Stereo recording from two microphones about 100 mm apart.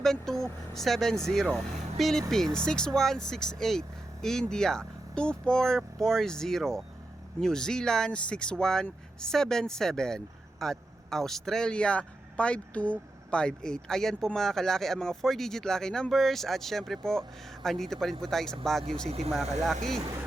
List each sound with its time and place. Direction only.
0.0 s vehicle: 5° left (ahead or behind)
0.7 s speech: 5° left (ahead or behind)
19.0 s speech: 90° right
19.3 s speech: centre (ahead or behind)